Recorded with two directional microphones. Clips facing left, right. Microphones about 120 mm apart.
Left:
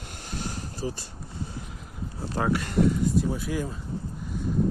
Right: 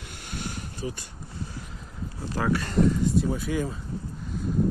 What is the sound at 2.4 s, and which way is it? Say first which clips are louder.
Speech: even; 20° left (ahead or behind).